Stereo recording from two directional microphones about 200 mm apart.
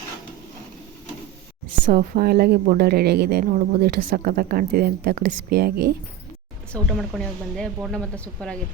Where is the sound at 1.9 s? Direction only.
50° right (ahead or behind).